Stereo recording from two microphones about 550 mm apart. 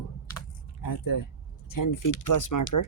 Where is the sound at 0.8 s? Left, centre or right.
Left.